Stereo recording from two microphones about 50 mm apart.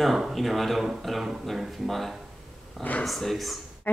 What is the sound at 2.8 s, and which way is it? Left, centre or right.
Speech, left.